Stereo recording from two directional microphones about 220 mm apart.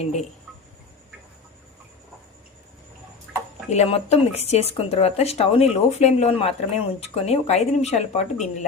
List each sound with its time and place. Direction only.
0.0 s speech: 30° left (ahead or behind)
3.3 s a sound: 5° right (ahead or behind)
3.7 s speech: 30° left (ahead or behind)